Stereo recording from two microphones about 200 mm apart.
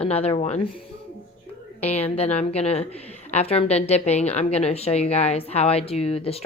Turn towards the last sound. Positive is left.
turn(degrees=30)  # may be behind; listen again after turning